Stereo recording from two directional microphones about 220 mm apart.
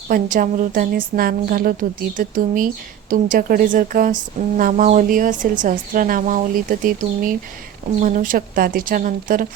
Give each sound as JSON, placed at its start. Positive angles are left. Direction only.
{"t": 0.1, "sound": "speech", "side_deg": -40}